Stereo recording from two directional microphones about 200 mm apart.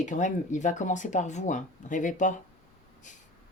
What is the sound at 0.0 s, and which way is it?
Speech, 40° left (ahead or behind).